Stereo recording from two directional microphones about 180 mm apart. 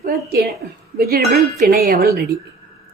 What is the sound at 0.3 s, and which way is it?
Speech, 60° right (ahead or behind).